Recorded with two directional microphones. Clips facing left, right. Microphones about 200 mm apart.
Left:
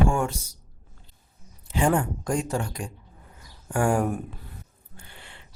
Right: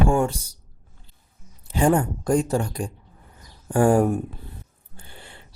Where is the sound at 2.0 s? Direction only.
35° right (ahead or behind).